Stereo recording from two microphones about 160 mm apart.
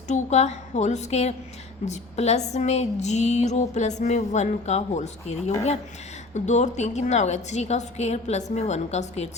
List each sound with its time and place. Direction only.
0.1 s speech: 45° left (ahead or behind)